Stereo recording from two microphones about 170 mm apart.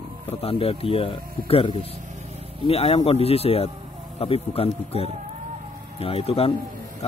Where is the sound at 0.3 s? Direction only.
35° left (ahead or behind).